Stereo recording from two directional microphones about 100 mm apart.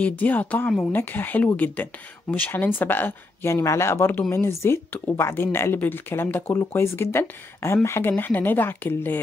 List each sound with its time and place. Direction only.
0.0 s speech: 15° left (ahead or behind)